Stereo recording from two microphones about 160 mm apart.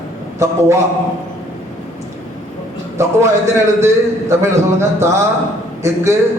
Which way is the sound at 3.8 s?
15° right (ahead or behind).